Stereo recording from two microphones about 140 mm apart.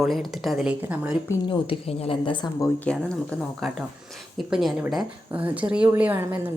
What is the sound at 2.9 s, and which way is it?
A woman's voice, 5° left (ahead or behind).